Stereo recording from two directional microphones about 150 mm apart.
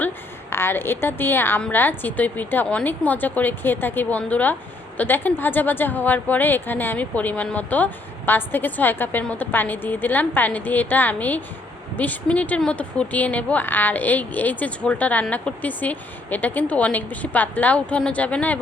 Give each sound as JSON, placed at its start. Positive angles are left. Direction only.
{"t": 0.5, "sound": "speech", "side_deg": 15}